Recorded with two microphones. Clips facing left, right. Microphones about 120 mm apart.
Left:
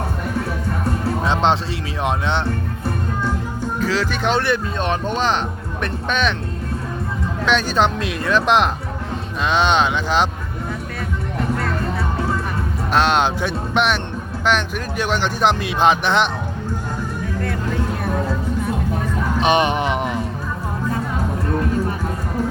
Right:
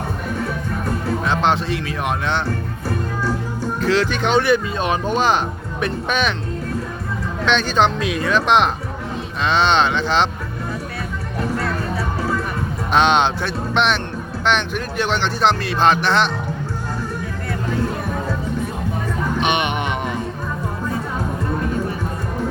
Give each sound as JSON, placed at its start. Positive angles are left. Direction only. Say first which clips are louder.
{"t": 1.2, "sound": "speech", "louder": "left 1 dB", "side_deg": 25}
{"t": 3.8, "sound": "speech", "louder": "right 3 dB", "side_deg": 5}
{"t": 7.4, "sound": "speech", "louder": "right 1 dB", "side_deg": 5}
{"t": 12.9, "sound": "speech", "louder": "right 1 dB", "side_deg": 5}
{"t": 19.4, "sound": "music", "louder": "left 5 dB", "side_deg": 35}